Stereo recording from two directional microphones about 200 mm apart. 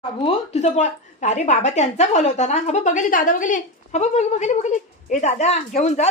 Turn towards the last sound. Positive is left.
turn(degrees=35)  # may be behind; listen again after turning